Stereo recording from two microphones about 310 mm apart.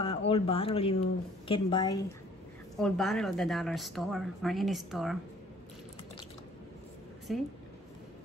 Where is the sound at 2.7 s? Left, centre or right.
Centre.